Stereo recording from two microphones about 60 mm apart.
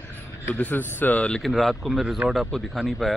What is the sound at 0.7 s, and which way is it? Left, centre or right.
Speech, left.